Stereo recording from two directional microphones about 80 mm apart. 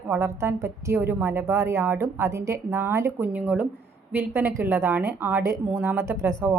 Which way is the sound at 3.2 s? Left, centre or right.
Right.